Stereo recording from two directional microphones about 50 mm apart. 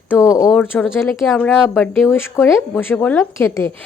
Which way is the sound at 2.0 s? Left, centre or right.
Left.